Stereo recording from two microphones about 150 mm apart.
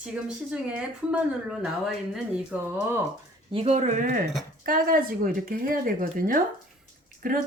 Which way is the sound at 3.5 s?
45° right (ahead or behind).